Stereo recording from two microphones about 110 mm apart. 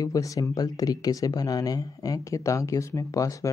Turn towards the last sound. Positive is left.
turn(degrees=30)  # may be behind; listen again after turning